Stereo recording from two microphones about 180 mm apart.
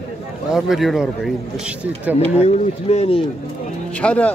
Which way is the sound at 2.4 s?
35° left (ahead or behind).